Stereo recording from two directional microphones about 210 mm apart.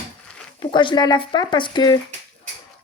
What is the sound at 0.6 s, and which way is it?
Speech, 25° left (ahead or behind).